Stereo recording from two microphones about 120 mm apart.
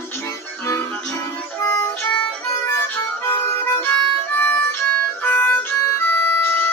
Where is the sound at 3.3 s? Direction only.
20° left (ahead or behind).